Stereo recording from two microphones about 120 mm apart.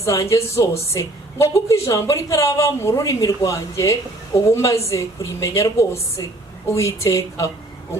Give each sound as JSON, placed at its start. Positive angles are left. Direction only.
{"t": 0.0, "sound": "a woman's voice", "side_deg": 25}